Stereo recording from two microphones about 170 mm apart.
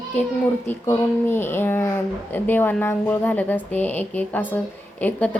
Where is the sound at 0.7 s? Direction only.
15° left (ahead or behind).